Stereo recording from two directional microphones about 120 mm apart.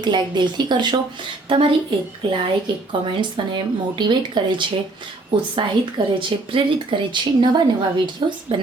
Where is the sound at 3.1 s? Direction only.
45° right (ahead or behind).